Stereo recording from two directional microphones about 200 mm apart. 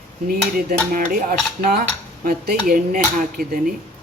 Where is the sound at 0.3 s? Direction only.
45° right (ahead or behind).